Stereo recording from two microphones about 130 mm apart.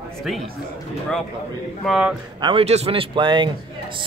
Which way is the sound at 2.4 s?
45° right (ahead or behind).